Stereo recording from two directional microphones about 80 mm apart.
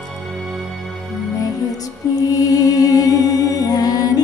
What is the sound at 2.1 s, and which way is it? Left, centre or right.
Music, left.